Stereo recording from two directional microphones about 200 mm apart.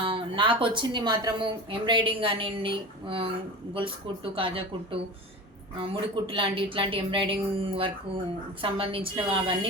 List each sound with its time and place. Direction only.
0.0 s a woman's voice: 25° right (ahead or behind)